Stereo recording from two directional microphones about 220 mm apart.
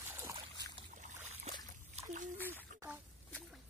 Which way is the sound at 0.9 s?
35° right (ahead or behind).